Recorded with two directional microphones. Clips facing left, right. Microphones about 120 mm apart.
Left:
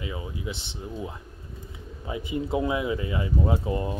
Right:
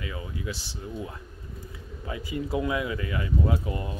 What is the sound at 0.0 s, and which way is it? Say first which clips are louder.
Speech: left 1 dB; 20° left (ahead or behind).